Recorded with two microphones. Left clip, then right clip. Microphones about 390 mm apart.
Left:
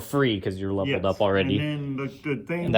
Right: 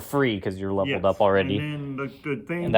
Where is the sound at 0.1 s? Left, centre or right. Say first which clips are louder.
Even; centre.